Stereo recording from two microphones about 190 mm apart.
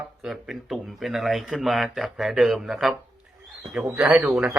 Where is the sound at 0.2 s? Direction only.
Centre (ahead or behind).